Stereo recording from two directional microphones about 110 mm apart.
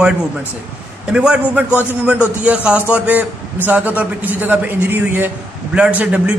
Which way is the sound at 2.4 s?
10° right (ahead or behind).